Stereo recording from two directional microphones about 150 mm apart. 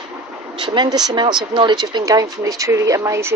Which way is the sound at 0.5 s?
30° right (ahead or behind).